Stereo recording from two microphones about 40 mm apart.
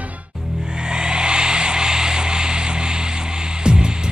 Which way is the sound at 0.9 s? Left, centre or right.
Right.